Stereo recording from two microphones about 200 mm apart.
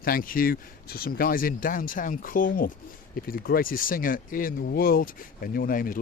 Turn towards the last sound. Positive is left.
turn(degrees=45)  # may be behind; listen again after turning